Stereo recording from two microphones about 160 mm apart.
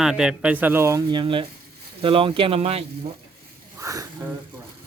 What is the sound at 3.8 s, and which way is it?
Sniff, 20° right (ahead or behind).